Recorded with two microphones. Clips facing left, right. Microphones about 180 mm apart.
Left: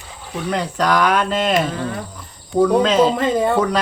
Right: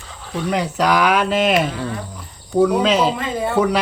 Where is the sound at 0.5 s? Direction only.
10° right (ahead or behind).